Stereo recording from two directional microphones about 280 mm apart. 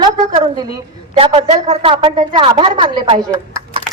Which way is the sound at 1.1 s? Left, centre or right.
Right.